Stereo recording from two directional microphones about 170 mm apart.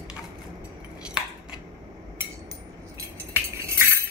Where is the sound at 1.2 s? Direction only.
5° right (ahead or behind).